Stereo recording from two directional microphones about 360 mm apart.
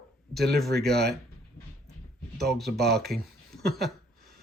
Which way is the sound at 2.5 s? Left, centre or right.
Centre.